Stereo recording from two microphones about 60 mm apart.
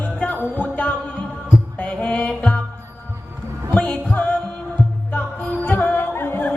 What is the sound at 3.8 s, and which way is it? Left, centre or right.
Music, left.